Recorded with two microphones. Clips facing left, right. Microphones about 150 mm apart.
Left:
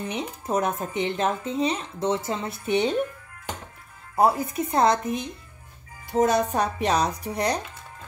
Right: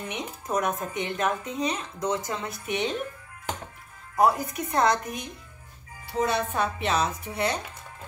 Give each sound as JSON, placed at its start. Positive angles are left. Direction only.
{"t": 0.1, "sound": "speech", "side_deg": 30}
{"t": 4.2, "sound": "speech", "side_deg": 30}
{"t": 6.1, "sound": "speech", "side_deg": 45}